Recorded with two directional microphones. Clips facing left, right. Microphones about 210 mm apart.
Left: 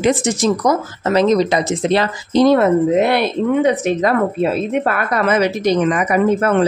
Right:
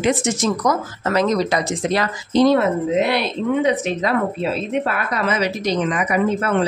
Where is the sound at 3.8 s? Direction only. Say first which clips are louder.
Left 4 dB; 50° left (ahead or behind).